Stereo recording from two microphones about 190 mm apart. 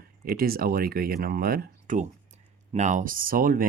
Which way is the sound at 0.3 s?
50° right (ahead or behind).